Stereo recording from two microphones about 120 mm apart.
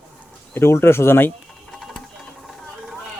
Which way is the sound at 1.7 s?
Centre (ahead or behind).